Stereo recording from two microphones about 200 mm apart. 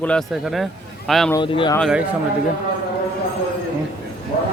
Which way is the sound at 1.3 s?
25° left (ahead or behind).